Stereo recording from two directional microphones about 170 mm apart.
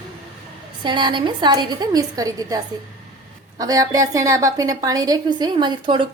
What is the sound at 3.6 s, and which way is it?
A woman's voice, 20° right (ahead or behind).